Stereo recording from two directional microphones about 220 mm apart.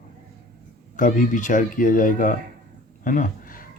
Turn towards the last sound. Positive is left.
turn(degrees=40)  # may be behind; listen again after turning